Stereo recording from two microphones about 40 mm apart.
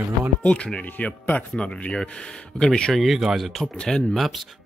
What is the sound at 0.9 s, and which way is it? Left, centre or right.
Speech, left.